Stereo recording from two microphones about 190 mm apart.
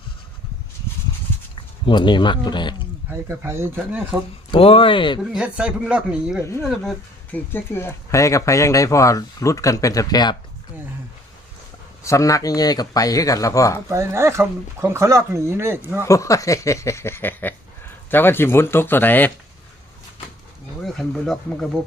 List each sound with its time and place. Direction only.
1.5 s speech: 25° left (ahead or behind)
3.1 s speech: 15° right (ahead or behind)
4.5 s speech: 30° left (ahead or behind)
5.2 s speech: 5° right (ahead or behind)
6.4 s speech: 15° left (ahead or behind)
6.7 s speech: 5° left (ahead or behind); by 10.3 s 20° left (ahead or behind)
12.0 s speech: 15° left (ahead or behind)
13.9 s speech: 15° right (ahead or behind)
16.0 s speech: 15° left (ahead or behind)
20.8 s speech: centre (ahead or behind)